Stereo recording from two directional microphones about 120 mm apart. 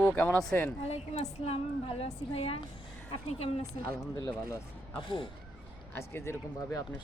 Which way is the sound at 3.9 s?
25° left (ahead or behind).